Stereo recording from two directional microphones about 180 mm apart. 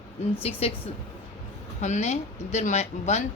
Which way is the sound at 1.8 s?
40° left (ahead or behind).